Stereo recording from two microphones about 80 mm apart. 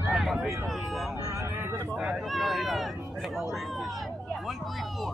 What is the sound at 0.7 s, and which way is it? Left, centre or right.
Vehicle, centre.